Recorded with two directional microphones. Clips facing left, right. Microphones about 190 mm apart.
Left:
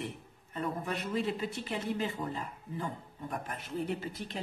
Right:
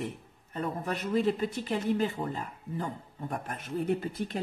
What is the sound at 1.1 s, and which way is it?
Speech, 45° right (ahead or behind).